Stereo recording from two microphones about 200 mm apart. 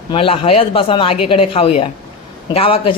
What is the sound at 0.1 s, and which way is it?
A woman's voice, 25° left (ahead or behind).